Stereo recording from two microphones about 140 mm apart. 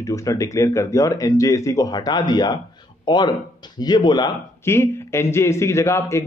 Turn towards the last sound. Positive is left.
turn(degrees=20)  # may be behind; listen again after turning